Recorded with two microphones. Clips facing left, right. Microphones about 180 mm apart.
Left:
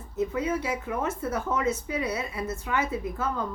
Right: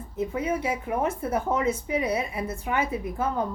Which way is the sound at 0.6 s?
30° right (ahead or behind).